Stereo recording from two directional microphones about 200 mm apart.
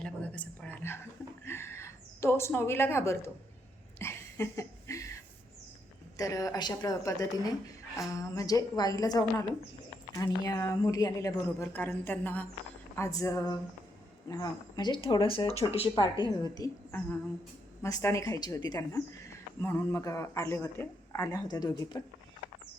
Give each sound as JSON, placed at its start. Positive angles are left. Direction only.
{"t": 0.0, "sound": "a sound", "side_deg": 5}
{"t": 6.1, "sound": "a woman's voice", "side_deg": 15}
{"t": 17.8, "sound": "a woman's voice", "side_deg": 15}